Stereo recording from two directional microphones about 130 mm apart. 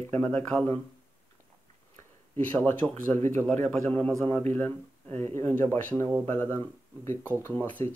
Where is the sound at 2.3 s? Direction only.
15° left (ahead or behind).